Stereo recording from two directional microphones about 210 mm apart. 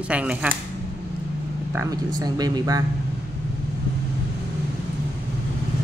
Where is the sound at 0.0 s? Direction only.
5° right (ahead or behind).